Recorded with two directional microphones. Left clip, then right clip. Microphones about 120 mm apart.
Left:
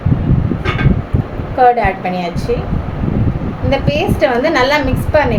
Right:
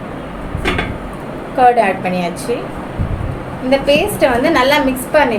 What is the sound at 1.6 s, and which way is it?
Speech, 10° left (ahead or behind).